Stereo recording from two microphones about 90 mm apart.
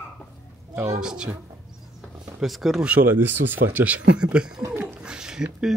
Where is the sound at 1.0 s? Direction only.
10° right (ahead or behind).